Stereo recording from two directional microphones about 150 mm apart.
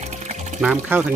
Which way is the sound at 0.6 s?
10° right (ahead or behind).